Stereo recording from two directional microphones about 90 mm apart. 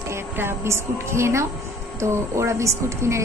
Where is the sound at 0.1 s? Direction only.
30° right (ahead or behind).